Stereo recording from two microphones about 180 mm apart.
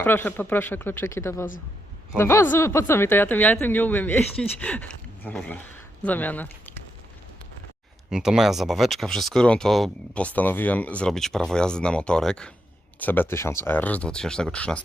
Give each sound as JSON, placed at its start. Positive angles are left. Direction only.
{"t": 0.0, "sound": "speech", "side_deg": 10}
{"t": 8.1, "sound": "speech", "side_deg": -5}